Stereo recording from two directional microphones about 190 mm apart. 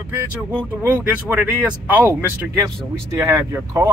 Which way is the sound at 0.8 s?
10° right (ahead or behind).